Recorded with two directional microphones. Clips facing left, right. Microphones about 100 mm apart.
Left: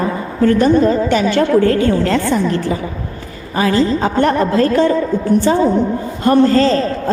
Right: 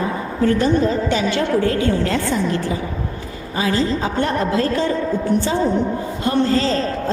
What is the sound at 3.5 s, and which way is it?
A woman's voice, 60° left (ahead or behind).